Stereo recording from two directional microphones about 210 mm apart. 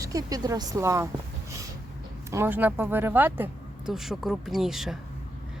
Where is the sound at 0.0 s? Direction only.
15° right (ahead or behind).